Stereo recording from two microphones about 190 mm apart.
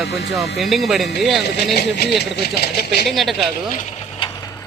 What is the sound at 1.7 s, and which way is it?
Speech, 55° left (ahead or behind).